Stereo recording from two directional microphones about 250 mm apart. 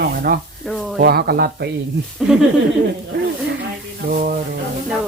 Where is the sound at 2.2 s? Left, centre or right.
Centre.